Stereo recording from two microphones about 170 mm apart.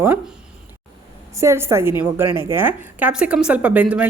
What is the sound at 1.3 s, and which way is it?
A woman's voice, 15° right (ahead or behind).